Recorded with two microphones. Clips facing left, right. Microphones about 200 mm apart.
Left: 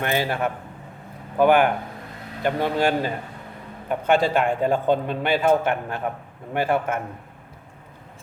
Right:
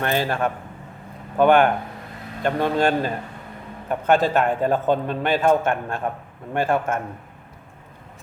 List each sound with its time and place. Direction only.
0.0 s a man's voice: 10° left (ahead or behind)